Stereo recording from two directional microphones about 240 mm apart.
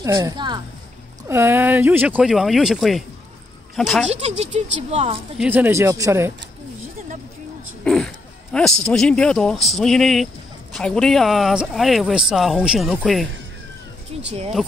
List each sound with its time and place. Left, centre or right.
0.0 s speech: centre
4.2 s speech: right
5.4 s speech: centre
7.8 s a sound: centre
8.8 s speech: centre